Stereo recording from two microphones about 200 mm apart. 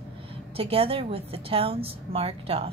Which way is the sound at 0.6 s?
30° right (ahead or behind).